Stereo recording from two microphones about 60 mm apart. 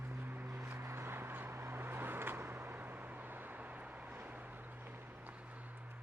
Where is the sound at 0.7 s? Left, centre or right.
Right.